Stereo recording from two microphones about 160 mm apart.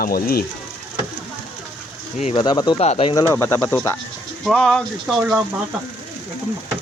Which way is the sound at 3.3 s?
15° left (ahead or behind).